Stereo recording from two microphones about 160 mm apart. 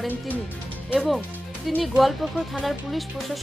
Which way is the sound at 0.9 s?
Centre (ahead or behind).